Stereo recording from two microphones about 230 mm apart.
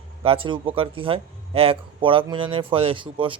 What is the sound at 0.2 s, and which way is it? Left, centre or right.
Speech, right.